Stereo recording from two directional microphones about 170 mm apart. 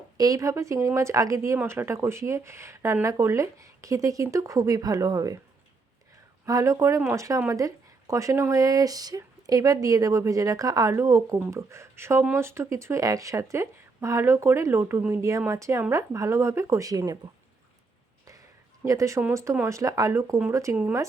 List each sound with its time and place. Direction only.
0.2 s speech: 20° right (ahead or behind)
6.4 s speech: 20° right (ahead or behind)
18.9 s speech: 20° right (ahead or behind)